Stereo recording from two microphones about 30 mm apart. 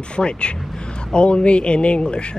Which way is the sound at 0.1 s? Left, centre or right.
Left.